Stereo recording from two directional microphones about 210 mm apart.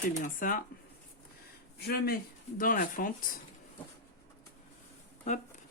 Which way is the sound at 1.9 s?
50° left (ahead or behind).